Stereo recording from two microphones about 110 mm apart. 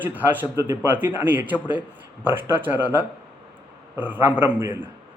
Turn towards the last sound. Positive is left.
turn(degrees=-20)  # may be behind; listen again after turning